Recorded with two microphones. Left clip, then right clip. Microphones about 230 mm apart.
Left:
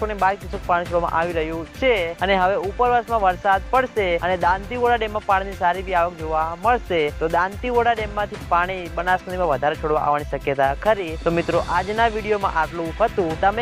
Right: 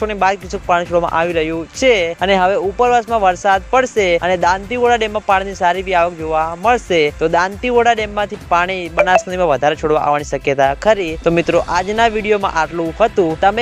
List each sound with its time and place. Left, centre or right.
0.0 s speech: right